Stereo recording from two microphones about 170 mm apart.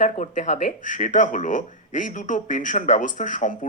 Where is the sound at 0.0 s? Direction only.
45° left (ahead or behind).